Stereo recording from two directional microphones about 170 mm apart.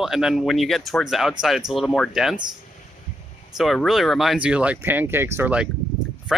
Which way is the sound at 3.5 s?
Centre (ahead or behind).